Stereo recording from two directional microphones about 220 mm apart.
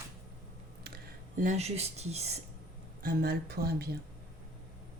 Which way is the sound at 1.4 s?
30° right (ahead or behind).